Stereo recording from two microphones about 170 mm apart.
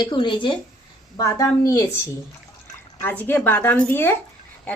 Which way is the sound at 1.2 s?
20° left (ahead or behind).